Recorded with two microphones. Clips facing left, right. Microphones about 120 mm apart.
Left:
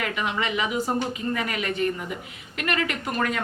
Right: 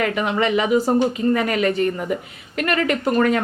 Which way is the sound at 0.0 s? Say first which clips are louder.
Right 7 dB; 45° right (ahead or behind).